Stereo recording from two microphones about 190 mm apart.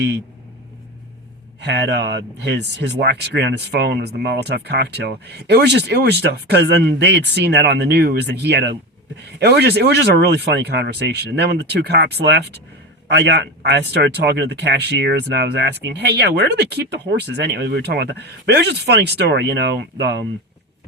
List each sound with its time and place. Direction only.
1.6 s speech: 65° right (ahead or behind)